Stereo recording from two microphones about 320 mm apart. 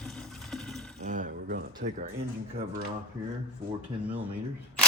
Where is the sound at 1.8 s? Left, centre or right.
Right.